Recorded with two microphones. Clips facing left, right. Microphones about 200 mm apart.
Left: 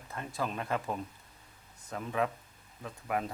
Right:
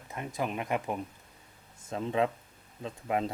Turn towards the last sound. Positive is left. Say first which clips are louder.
# right 3 dB
turn(degrees=-25)  # may be behind; listen again after turning